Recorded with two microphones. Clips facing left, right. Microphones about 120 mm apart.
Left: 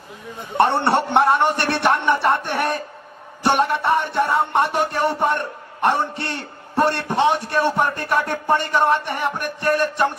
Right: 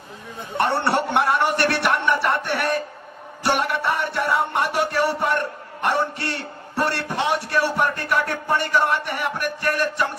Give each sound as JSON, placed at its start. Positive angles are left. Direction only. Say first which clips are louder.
{"t": 0.6, "sound": "music", "louder": "left 3 dB", "side_deg": 25}